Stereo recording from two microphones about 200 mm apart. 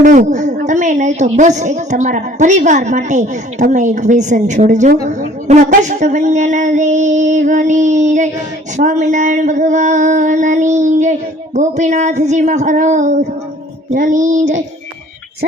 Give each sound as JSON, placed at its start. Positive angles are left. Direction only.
{"t": 0.0, "sound": "a woman's voice", "side_deg": -40}